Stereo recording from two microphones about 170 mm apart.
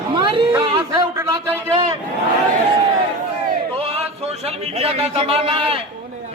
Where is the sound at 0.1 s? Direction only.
30° right (ahead or behind).